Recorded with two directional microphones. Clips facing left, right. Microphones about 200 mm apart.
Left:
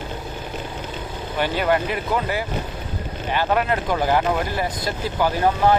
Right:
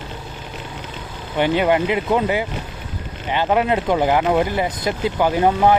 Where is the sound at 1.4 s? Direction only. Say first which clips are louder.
Right 4 dB; 20° right (ahead or behind).